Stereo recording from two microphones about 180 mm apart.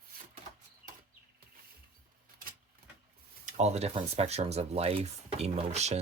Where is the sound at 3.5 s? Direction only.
40° right (ahead or behind).